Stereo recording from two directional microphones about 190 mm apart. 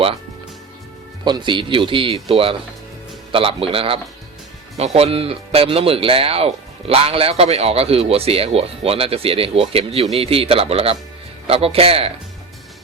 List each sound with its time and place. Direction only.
1.2 s speech: 25° right (ahead or behind)